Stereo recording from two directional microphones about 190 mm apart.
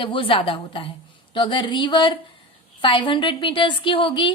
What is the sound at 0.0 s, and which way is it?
A woman's voice, 25° left (ahead or behind).